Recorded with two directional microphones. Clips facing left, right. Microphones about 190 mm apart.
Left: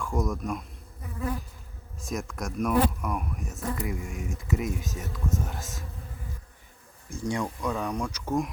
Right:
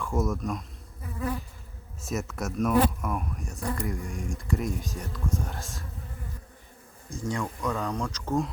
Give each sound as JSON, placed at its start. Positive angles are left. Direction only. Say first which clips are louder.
{"t": 0.0, "sound": "speech", "louder": "right 1 dB", "side_deg": 0}
{"t": 2.0, "sound": "speech", "louder": "right 1 dB", "side_deg": -5}
{"t": 7.3, "sound": "speech", "louder": "left 1 dB", "side_deg": 15}